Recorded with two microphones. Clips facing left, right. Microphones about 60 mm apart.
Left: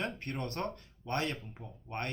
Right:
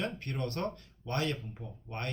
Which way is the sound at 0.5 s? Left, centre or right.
Left.